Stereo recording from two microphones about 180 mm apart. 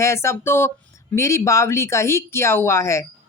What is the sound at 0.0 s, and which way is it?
Speech, 15° left (ahead or behind).